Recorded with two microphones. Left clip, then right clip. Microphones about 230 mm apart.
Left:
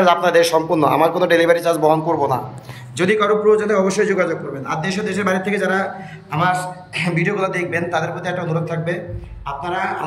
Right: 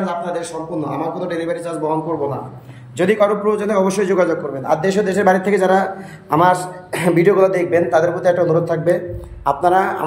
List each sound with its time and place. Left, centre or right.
0.0 s a man's voice: centre